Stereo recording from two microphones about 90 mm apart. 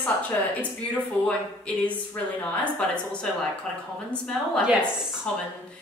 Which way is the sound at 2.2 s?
20° left (ahead or behind).